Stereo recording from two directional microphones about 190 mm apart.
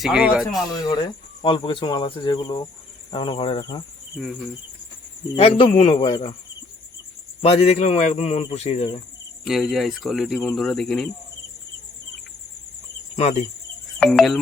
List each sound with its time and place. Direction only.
0.0 s speech: 5° right (ahead or behind)
1.4 s speech: 25° left (ahead or behind)
5.4 s speech: 30° left (ahead or behind)
7.4 s speech: 30° left (ahead or behind)
9.4 s speech: centre (ahead or behind)
13.1 s cricket: 35° left (ahead or behind)
14.0 s speech: centre (ahead or behind)